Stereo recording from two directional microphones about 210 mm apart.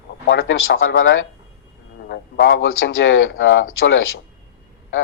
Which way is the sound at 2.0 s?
50° left (ahead or behind).